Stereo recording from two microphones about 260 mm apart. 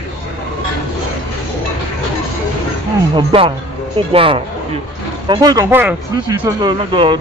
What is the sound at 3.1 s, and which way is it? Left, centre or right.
Speech, right.